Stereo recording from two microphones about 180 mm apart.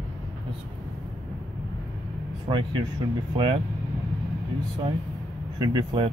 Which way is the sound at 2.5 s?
25° right (ahead or behind).